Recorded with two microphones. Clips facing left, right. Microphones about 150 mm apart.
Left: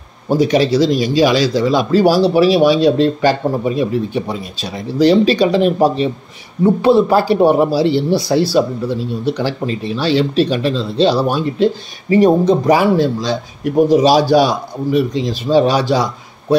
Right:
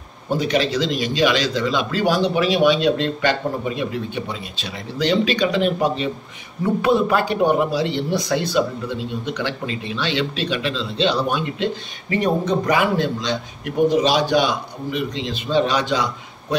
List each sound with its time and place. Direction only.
0.3 s speech: 40° left (ahead or behind)